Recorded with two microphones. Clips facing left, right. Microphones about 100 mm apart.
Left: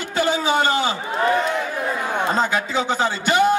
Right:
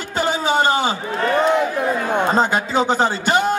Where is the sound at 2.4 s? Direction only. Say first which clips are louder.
Right 3 dB; 45° right (ahead or behind).